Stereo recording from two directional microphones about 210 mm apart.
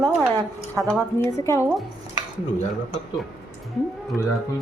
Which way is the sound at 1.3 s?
15° left (ahead or behind).